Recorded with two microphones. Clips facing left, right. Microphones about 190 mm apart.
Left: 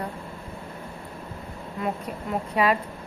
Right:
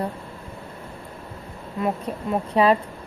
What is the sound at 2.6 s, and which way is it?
Speech, 30° right (ahead or behind).